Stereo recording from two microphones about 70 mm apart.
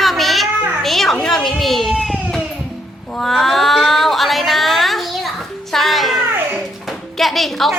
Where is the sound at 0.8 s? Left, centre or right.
Centre.